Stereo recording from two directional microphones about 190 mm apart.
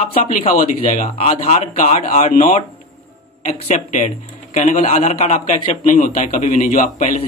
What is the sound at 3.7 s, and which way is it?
A man's voice, 40° left (ahead or behind).